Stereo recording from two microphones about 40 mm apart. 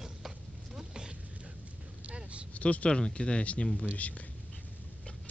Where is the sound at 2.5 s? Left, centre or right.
Left.